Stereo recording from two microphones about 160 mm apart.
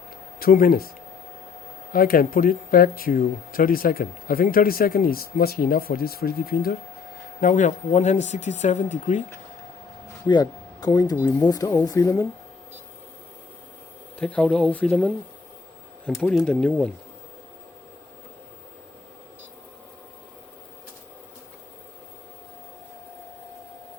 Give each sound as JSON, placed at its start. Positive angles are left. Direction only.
{"t": 0.3, "sound": "speech", "side_deg": 65}
{"t": 1.9, "sound": "speech", "side_deg": 65}
{"t": 7.4, "sound": "speech", "side_deg": 50}
{"t": 10.2, "sound": "speech", "side_deg": 25}
{"t": 14.2, "sound": "speech", "side_deg": 10}